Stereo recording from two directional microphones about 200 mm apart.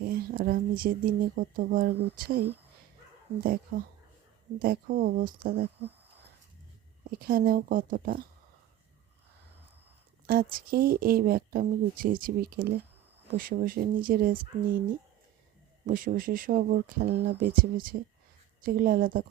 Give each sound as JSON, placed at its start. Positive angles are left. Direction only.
{"t": 0.0, "sound": "speech", "side_deg": -50}
{"t": 3.4, "sound": "speech", "side_deg": -45}
{"t": 7.2, "sound": "speech", "side_deg": -45}
{"t": 10.2, "sound": "speech", "side_deg": -45}
{"t": 15.9, "sound": "speech", "side_deg": -45}